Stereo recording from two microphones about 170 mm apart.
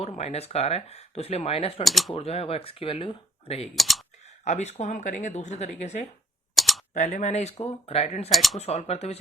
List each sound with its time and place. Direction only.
0.2 s speech: 40° left (ahead or behind)
1.8 s speech: centre (ahead or behind)
2.1 s speech: 35° left (ahead or behind)
3.8 s computer keyboard: centre (ahead or behind)
4.4 s speech: 40° left (ahead or behind)
6.5 s camera: centre (ahead or behind)
6.9 s speech: 45° left (ahead or behind)
8.3 s speech: centre (ahead or behind)
8.5 s speech: 40° left (ahead or behind)